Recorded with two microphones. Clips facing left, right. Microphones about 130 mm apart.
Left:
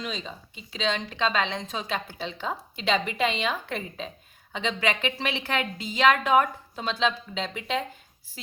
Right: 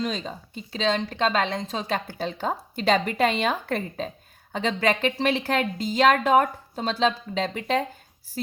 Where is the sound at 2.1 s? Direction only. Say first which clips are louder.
Right 4 dB; 45° right (ahead or behind).